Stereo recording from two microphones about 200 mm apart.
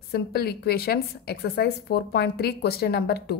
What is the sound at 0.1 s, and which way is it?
A woman's voice, 50° left (ahead or behind).